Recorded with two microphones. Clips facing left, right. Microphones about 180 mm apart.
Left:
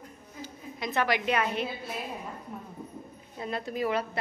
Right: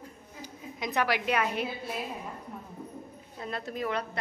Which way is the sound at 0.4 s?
15° right (ahead or behind).